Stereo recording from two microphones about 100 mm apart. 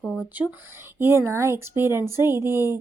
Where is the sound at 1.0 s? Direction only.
25° right (ahead or behind).